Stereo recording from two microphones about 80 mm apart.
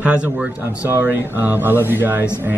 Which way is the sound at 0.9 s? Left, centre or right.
Right.